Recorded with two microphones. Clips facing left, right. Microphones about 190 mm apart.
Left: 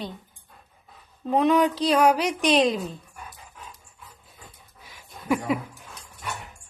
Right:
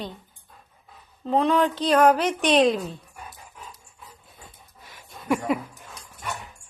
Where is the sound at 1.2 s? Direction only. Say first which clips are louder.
Left 1 dB; 10° left (ahead or behind).